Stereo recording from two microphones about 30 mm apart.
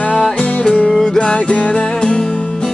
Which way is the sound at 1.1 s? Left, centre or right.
Left.